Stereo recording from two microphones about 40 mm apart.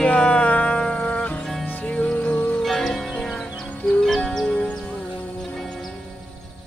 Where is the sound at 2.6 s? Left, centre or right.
Centre.